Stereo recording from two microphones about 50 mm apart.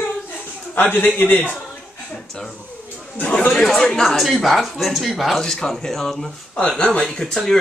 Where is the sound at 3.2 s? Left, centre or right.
Left.